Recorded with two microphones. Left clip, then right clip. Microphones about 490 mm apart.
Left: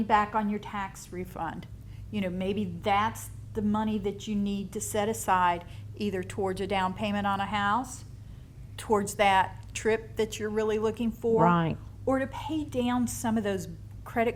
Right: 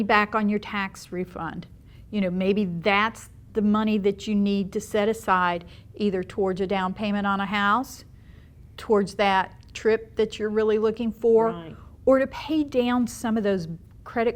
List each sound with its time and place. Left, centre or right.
0.1 s a woman's voice: right
8.7 s a woman's voice: right
11.4 s a woman's voice: left
12.0 s a woman's voice: right